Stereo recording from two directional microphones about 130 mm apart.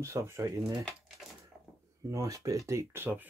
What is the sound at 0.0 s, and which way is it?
Speech, 20° right (ahead or behind).